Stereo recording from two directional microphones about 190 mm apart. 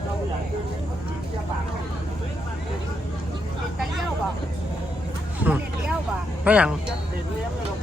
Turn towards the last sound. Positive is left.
turn(degrees=-5)  # may be behind; listen again after turning